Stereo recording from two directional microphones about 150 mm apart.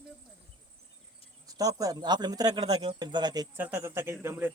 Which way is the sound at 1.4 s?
25° right (ahead or behind).